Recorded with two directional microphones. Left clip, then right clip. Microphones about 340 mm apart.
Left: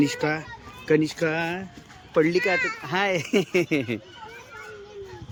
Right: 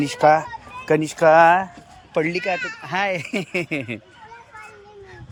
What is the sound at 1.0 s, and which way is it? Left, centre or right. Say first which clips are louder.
Speech: right 12 dB; centre.